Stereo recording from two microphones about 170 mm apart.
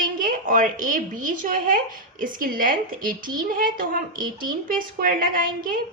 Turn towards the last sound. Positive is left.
turn(degrees=-55)  # may be behind; listen again after turning